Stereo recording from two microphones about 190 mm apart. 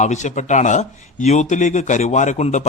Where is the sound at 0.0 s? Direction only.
40° left (ahead or behind).